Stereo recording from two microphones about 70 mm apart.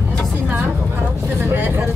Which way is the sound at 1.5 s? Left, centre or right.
Right.